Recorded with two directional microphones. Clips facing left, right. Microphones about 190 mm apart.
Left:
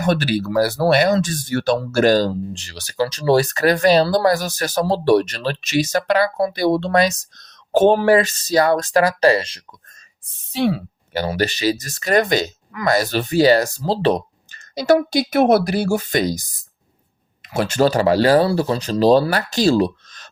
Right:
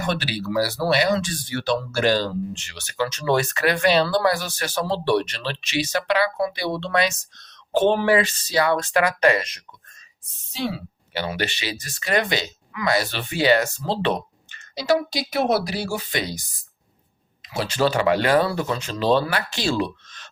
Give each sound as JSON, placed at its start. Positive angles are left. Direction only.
{"t": 0.0, "sound": "speech", "side_deg": 45}
{"t": 10.5, "sound": "speech", "side_deg": 55}
{"t": 17.4, "sound": "speech", "side_deg": 50}